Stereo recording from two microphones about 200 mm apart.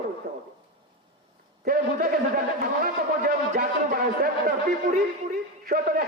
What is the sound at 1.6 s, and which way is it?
A man's voice, 45° right (ahead or behind).